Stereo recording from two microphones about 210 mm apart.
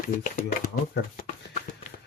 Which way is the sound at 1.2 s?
40° left (ahead or behind).